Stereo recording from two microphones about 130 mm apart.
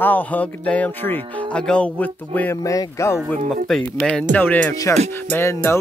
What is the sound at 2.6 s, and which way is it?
Speech, 25° left (ahead or behind).